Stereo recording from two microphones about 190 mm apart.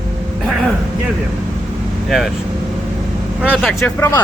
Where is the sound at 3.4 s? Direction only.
5° right (ahead or behind).